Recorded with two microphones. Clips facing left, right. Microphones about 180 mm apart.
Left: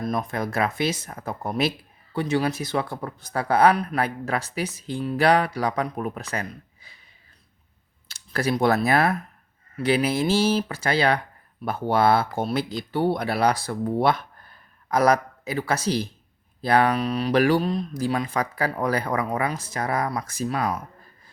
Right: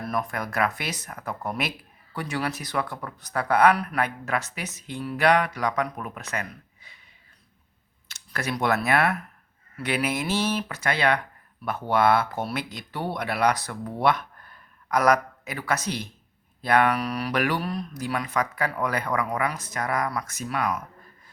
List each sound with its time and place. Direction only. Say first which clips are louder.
0.0 s speech: left 3 dB; 20° left (ahead or behind)
8.0 s speech: left 6 dB; 35° left (ahead or behind)